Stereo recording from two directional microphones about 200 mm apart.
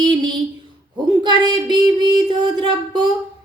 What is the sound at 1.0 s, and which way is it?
Speech, 20° right (ahead or behind).